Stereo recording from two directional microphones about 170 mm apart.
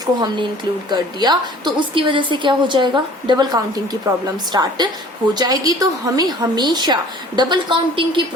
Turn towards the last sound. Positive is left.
turn(degrees=-25)  # may be behind; listen again after turning